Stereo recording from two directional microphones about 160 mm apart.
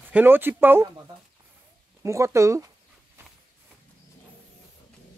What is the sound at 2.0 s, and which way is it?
Speech, 20° right (ahead or behind).